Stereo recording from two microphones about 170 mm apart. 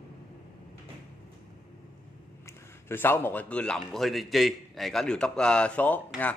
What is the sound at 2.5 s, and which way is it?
A man's voice, 15° left (ahead or behind).